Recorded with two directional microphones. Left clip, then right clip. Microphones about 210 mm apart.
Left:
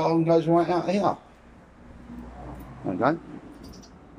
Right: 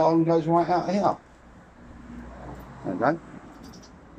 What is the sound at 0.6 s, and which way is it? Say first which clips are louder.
Speech: even; 25° left (ahead or behind).